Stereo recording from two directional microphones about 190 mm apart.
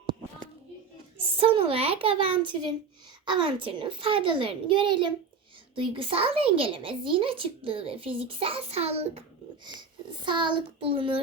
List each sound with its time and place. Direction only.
1.4 s speech: 30° right (ahead or behind)
10.2 s speech: 25° right (ahead or behind)